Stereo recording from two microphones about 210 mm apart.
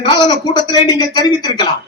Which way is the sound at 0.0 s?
20° left (ahead or behind).